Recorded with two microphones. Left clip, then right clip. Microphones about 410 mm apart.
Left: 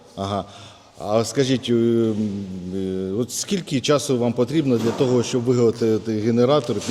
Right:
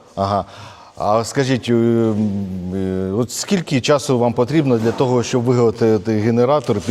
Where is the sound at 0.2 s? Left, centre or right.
Right.